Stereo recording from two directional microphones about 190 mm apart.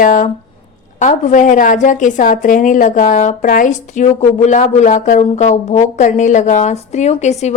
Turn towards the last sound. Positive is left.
turn(degrees=35)  # may be behind; listen again after turning